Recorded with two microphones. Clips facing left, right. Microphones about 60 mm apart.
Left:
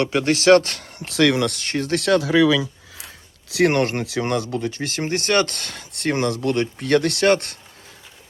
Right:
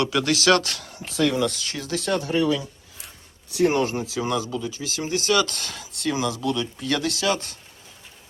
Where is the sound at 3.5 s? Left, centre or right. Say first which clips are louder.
Left 3 dB; left.